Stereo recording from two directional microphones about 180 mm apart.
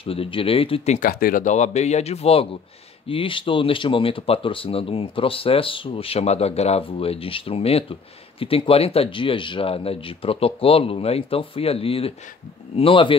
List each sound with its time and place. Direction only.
0.0 s speech: 30° left (ahead or behind)
0.9 s speech: 50° left (ahead or behind); by 13.1 s 30° left (ahead or behind)